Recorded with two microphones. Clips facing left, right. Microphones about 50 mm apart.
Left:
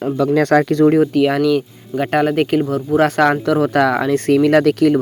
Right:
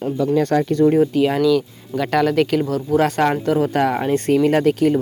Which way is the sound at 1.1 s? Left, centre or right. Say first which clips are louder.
Left 2 dB; left.